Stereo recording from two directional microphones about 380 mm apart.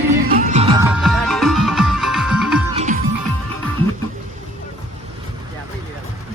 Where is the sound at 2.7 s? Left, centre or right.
Centre.